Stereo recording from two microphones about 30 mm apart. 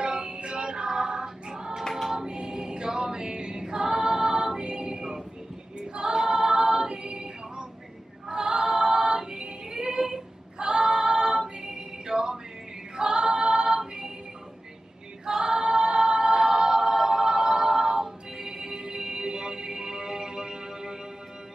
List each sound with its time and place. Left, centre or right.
0.0 s music: right
1.2 s choir: right
8.3 s female singing: right
11.6 s music: centre
12.9 s a capella: right
15.2 s choir: right